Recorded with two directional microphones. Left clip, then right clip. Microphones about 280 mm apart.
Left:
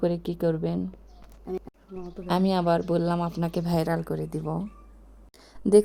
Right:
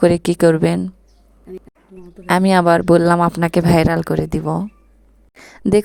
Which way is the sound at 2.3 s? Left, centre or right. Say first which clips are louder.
Right 11 dB; right.